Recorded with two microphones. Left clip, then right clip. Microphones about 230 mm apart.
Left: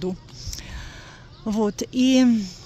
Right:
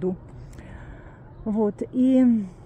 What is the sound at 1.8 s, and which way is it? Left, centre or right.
Speech, centre.